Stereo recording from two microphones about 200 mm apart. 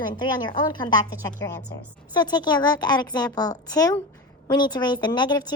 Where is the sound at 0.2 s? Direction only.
20° left (ahead or behind).